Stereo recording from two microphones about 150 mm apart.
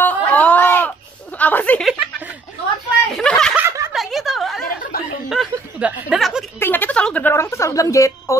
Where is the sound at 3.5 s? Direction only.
15° right (ahead or behind).